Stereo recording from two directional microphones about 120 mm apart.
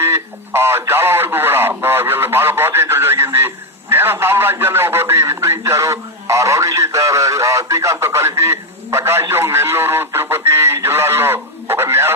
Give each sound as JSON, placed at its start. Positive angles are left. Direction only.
{"t": 0.0, "sound": "a man's voice", "side_deg": -20}